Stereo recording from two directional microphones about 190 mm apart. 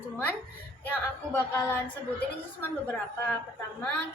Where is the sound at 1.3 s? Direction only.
10° left (ahead or behind).